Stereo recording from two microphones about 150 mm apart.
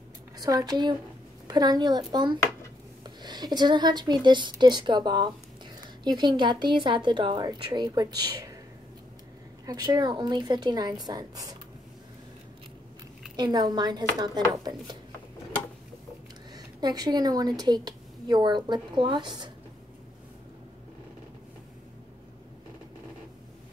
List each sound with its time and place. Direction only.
0.4 s a woman's voice: 25° right (ahead or behind)
9.7 s a woman's voice: 30° right (ahead or behind)
13.4 s a woman's voice: 25° right (ahead or behind)
16.5 s a woman's voice: 25° right (ahead or behind)